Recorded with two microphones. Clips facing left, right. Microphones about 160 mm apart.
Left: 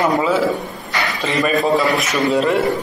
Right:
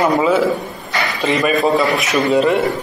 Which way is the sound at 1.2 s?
Centre (ahead or behind).